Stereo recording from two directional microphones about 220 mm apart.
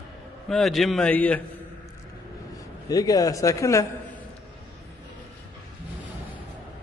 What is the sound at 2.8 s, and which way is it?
A man's voice, 15° left (ahead or behind).